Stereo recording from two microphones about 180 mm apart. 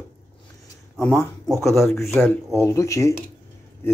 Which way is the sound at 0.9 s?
5° left (ahead or behind).